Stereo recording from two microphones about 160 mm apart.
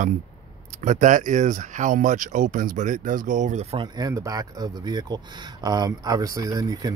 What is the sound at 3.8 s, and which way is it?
Speech, 25° right (ahead or behind).